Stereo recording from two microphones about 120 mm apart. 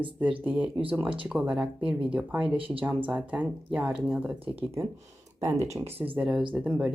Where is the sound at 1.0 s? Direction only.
45° right (ahead or behind).